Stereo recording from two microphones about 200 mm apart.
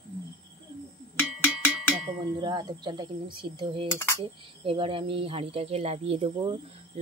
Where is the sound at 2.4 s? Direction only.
20° right (ahead or behind).